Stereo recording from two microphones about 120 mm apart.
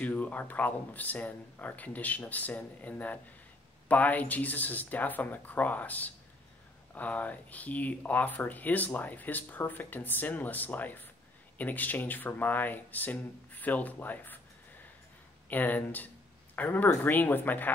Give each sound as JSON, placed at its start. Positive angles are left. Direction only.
{"t": 0.0, "sound": "speech", "side_deg": 15}
{"t": 15.5, "sound": "speech", "side_deg": 15}